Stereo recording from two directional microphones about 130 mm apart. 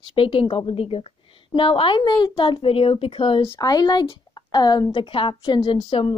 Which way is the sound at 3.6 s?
30° left (ahead or behind).